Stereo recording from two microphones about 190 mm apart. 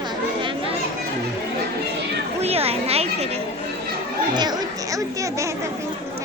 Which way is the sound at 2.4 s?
30° right (ahead or behind).